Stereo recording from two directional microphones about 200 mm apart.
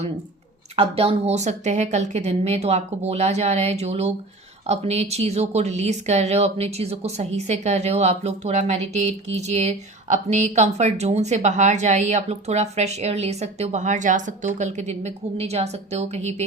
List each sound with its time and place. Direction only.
0.8 s a woman's voice: 30° right (ahead or behind)